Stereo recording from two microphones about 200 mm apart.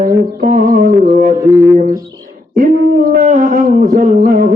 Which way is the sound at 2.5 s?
40° right (ahead or behind).